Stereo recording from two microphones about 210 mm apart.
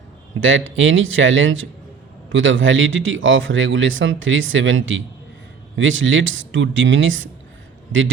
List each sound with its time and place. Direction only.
0.3 s a man's voice: 70° right (ahead or behind)